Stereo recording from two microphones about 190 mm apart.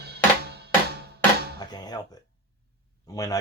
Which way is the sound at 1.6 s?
20° left (ahead or behind).